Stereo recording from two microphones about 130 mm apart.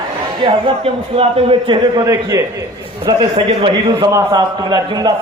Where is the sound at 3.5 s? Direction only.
50° right (ahead or behind).